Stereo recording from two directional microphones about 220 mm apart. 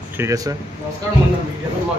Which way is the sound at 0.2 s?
15° right (ahead or behind).